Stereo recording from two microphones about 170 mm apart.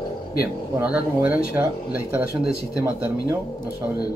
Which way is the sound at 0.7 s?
10° right (ahead or behind).